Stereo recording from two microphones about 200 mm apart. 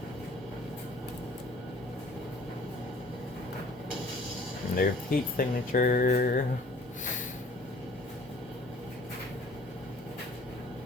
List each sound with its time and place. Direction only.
4.7 s speech: 45° left (ahead or behind)